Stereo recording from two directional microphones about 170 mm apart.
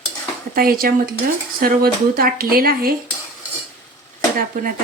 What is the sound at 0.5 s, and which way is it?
Speech, 60° right (ahead or behind).